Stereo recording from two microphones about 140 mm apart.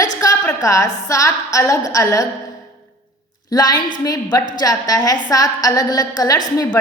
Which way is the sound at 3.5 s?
25° left (ahead or behind).